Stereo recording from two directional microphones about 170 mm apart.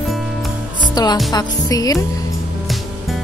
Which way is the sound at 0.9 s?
25° left (ahead or behind).